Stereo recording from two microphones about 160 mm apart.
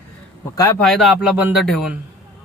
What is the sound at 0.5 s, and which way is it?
Speech, 20° left (ahead or behind).